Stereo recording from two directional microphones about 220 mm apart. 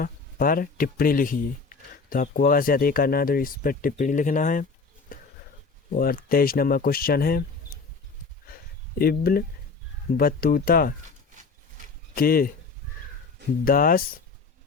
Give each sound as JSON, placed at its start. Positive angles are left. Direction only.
{"t": 0.0, "sound": "speech", "side_deg": 40}
{"t": 6.0, "sound": "speech", "side_deg": 40}
{"t": 9.0, "sound": "speech", "side_deg": 45}
{"t": 12.1, "sound": "speech", "side_deg": 40}
{"t": 13.7, "sound": "speech", "side_deg": 40}